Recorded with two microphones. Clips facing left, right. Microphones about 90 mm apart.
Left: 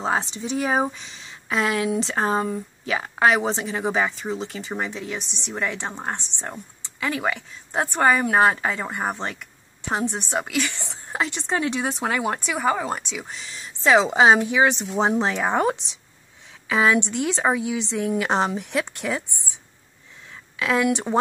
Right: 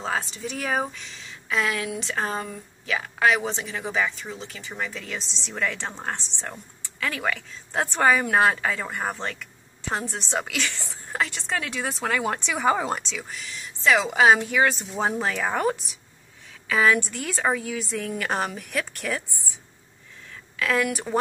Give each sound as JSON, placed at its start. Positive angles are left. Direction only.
{"t": 0.0, "sound": "a woman's voice", "side_deg": 25}
{"t": 1.5, "sound": "a woman's voice", "side_deg": 30}
{"t": 5.4, "sound": "a woman's voice", "side_deg": 15}
{"t": 12.6, "sound": "speech", "side_deg": -5}
{"t": 12.9, "sound": "a woman's voice", "side_deg": 10}
{"t": 13.3, "sound": "a woman's voice", "side_deg": 30}